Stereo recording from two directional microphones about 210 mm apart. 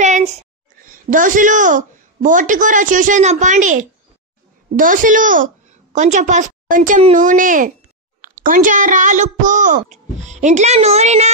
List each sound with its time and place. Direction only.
0.0 s a woman's voice: 35° right (ahead or behind)